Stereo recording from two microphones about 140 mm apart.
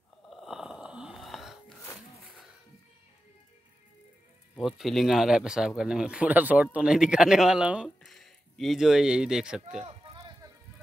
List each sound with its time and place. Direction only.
0.3 s wheeze: centre (ahead or behind)
4.6 s speech: centre (ahead or behind)
10.1 s music: 30° right (ahead or behind)